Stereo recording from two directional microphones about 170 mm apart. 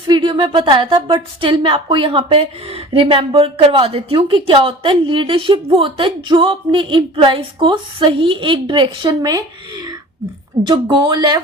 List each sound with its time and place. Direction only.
0.1 s a woman's voice: 25° right (ahead or behind)